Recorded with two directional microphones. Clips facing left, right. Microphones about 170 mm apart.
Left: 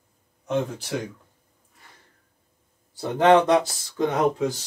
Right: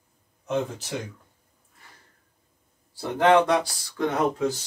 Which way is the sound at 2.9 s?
25° left (ahead or behind).